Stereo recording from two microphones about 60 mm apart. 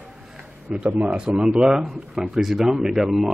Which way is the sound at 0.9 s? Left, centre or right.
Right.